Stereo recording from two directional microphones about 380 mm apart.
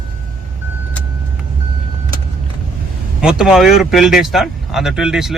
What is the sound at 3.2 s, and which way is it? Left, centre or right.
Speech, centre.